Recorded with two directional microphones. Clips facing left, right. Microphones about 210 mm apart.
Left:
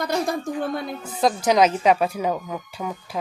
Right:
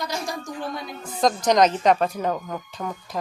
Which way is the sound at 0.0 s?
55° left (ahead or behind).